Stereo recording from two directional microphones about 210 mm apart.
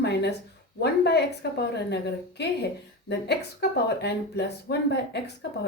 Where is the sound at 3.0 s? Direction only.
50° left (ahead or behind).